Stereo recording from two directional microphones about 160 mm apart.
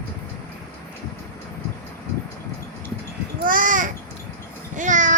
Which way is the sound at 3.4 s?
55° right (ahead or behind).